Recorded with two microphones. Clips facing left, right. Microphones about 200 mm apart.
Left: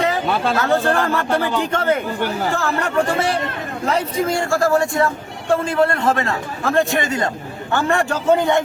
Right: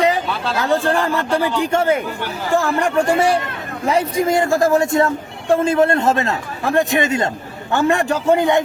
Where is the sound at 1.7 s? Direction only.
10° right (ahead or behind).